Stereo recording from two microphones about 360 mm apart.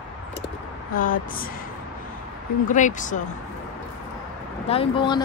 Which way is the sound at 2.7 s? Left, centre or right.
Left.